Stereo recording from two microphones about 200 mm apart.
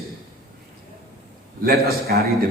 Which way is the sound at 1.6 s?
50° right (ahead or behind).